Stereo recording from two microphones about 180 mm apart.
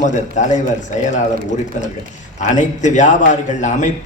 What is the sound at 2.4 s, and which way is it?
A man's voice, 45° left (ahead or behind).